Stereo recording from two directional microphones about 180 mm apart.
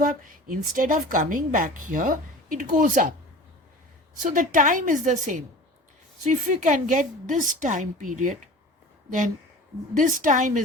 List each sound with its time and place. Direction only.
0.2 s a woman's voice: 50° right (ahead or behind)
4.2 s a woman's voice: 45° right (ahead or behind)
10.0 s a woman's voice: 45° right (ahead or behind)